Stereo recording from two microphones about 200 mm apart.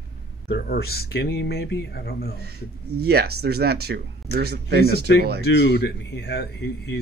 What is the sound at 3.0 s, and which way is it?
Speech, 50° right (ahead or behind).